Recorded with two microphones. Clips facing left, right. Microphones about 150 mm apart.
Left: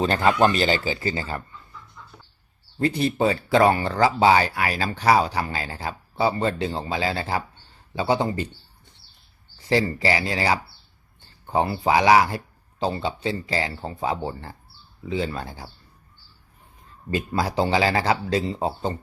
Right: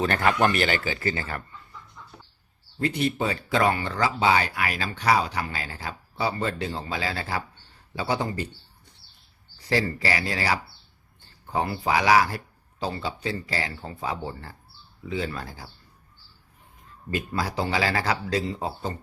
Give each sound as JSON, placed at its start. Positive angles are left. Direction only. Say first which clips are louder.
{"t": 0.0, "sound": "speech", "louder": "left 3 dB", "side_deg": 25}
{"t": 2.7, "sound": "speech", "louder": "left 3 dB", "side_deg": 30}
{"t": 9.6, "sound": "speech", "louder": "left 4 dB", "side_deg": 25}
{"t": 17.1, "sound": "speech", "louder": "left 4 dB", "side_deg": 30}